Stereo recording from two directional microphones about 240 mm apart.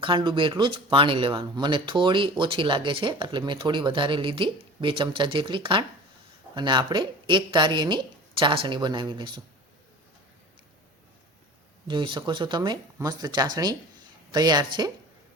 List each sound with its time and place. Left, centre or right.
0.0 s speech: centre
11.9 s speech: right